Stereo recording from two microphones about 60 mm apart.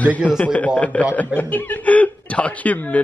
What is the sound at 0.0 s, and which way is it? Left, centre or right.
Speech, left.